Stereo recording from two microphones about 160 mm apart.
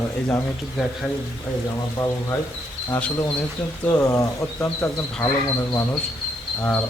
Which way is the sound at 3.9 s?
20° left (ahead or behind).